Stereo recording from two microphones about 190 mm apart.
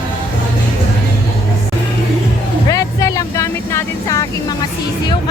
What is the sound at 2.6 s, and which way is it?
Vehicle, 20° left (ahead or behind).